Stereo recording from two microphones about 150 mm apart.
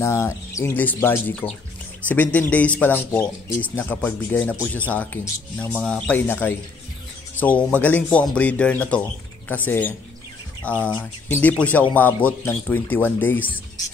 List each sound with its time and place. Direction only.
0.0 s speech: 20° left (ahead or behind)